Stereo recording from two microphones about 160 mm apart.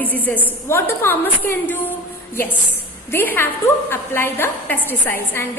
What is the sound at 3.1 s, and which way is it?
A woman's voice, 15° left (ahead or behind).